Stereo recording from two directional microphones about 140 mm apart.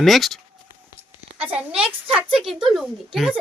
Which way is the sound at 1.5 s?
10° right (ahead or behind).